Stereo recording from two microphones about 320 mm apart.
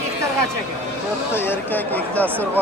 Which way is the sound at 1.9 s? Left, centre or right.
Centre.